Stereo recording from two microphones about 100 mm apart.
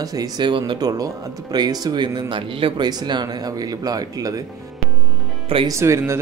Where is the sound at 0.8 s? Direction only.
40° right (ahead or behind); by 2.7 s 65° right (ahead or behind).